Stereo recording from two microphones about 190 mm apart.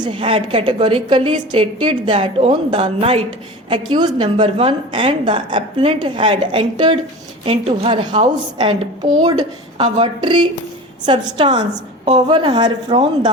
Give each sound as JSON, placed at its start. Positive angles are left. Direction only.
{"t": 0.0, "sound": "a woman's voice", "side_deg": -25}